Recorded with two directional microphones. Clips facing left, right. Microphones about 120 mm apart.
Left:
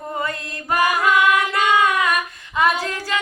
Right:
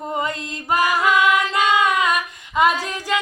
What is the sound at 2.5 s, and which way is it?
Female singing, 15° right (ahead or behind).